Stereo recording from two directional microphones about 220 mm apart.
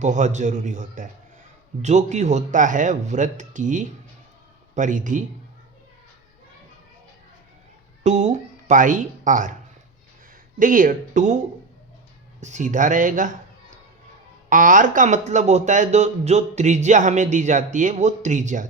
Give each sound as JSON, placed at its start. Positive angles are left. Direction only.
{"t": 0.0, "sound": "a man's voice", "side_deg": -35}
{"t": 8.0, "sound": "speech", "side_deg": -30}
{"t": 10.6, "sound": "a man's voice", "side_deg": -35}
{"t": 12.4, "sound": "a man's voice", "side_deg": -35}